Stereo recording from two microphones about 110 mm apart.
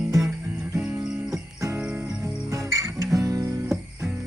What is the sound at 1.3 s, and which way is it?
Music, 25° right (ahead or behind).